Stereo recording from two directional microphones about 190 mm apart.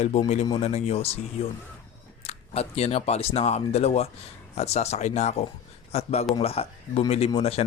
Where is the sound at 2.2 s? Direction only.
35° left (ahead or behind).